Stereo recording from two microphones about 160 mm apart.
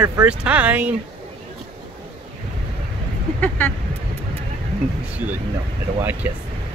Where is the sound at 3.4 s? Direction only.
10° left (ahead or behind).